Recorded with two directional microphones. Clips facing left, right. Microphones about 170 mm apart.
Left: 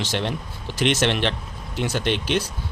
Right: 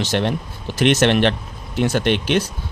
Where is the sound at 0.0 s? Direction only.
55° right (ahead or behind).